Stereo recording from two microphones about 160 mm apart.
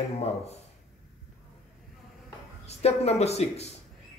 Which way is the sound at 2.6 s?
40° left (ahead or behind).